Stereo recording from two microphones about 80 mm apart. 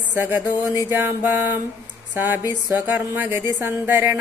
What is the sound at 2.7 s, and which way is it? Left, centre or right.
Speech, right.